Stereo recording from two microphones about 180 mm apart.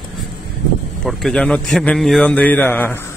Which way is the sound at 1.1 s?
Centre (ahead or behind).